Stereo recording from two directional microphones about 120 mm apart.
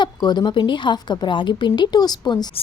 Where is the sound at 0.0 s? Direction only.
35° left (ahead or behind).